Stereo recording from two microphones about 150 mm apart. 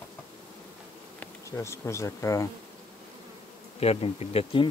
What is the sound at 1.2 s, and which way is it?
Bee, 20° left (ahead or behind).